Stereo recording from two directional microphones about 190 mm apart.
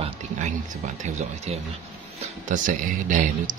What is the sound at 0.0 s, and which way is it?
Speech, 40° right (ahead or behind).